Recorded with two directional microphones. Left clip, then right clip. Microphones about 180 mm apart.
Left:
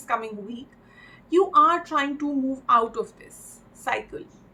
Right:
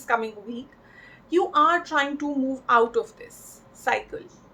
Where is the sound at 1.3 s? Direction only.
35° right (ahead or behind).